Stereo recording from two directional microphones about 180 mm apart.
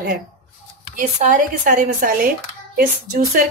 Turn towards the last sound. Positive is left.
turn(degrees=-50)  # may be behind; listen again after turning